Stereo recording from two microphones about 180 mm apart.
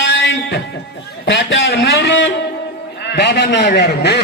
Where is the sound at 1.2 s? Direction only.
90° left.